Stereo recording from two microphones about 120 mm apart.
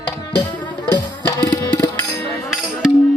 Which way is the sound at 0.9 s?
30° left (ahead or behind).